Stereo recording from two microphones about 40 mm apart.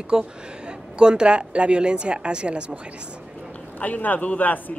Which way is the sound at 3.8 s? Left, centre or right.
Left.